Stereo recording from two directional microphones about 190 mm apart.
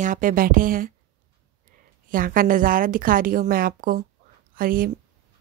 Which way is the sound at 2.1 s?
45° right (ahead or behind).